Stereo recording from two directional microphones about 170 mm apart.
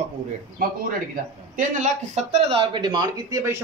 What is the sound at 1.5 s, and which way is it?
Speech, 45° right (ahead or behind).